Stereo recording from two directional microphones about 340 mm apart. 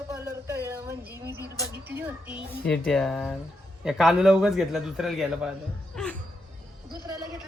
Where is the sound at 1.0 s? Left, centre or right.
Right.